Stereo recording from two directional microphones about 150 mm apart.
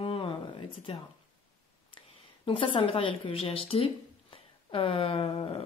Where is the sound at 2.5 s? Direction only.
35° left (ahead or behind).